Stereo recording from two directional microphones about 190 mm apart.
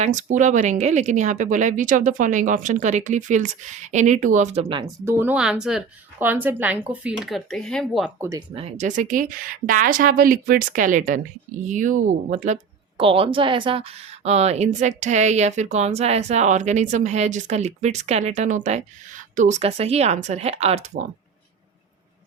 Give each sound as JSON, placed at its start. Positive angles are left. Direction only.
{"t": 0.0, "sound": "speech", "side_deg": -40}
{"t": 5.0, "sound": "speech", "side_deg": -10}
{"t": 8.2, "sound": "speech", "side_deg": -15}
{"t": 8.5, "sound": "a woman's voice", "side_deg": -35}
{"t": 13.0, "sound": "a woman's voice", "side_deg": -30}